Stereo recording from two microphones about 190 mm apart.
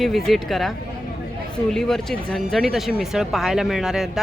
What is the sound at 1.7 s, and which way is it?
Speech, centre (ahead or behind).